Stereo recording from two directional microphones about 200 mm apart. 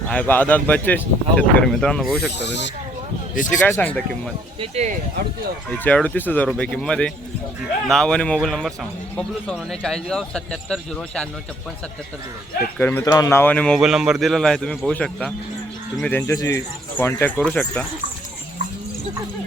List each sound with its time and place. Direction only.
0.1 s speech: 10° left (ahead or behind)
2.4 s speech: 60° left (ahead or behind)
3.4 s speech: 40° left (ahead or behind)
3.7 s speech: 10° left (ahead or behind)
4.6 s speech: 30° right (ahead or behind)
5.8 s a man's voice: 10° left (ahead or behind)
12.8 s a man's voice: 15° left (ahead or behind)